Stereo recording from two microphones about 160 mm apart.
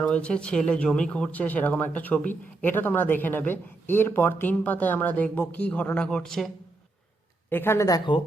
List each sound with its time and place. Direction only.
0.0 s speech: 5° left (ahead or behind)
7.5 s speech: 15° left (ahead or behind)